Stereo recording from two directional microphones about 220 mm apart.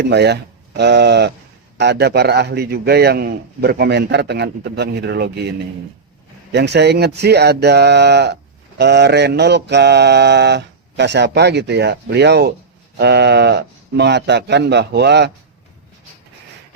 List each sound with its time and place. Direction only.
0.0 s mantra: 50° right (ahead or behind)
6.5 s mantra: 50° right (ahead or behind)